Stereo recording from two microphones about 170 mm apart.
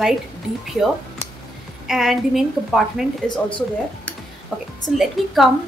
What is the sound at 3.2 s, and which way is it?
Speech, 25° left (ahead or behind).